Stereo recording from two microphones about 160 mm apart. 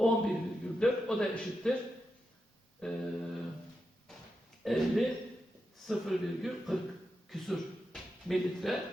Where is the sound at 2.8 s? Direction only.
5° left (ahead or behind).